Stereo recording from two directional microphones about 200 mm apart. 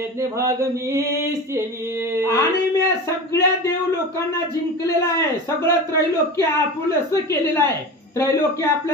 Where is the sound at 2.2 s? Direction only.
15° left (ahead or behind).